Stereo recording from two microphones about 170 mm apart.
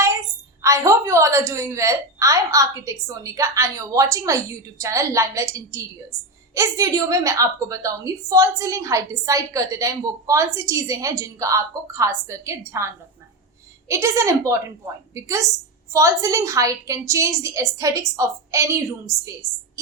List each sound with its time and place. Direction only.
0.6 s a woman's voice: 15° right (ahead or behind)